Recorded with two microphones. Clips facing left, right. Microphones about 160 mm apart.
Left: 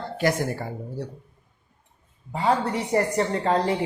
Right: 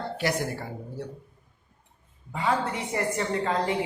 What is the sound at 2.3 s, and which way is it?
A woman's voice, 35° left (ahead or behind).